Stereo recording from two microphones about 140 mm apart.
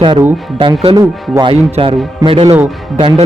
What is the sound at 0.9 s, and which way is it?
Speech, 30° right (ahead or behind).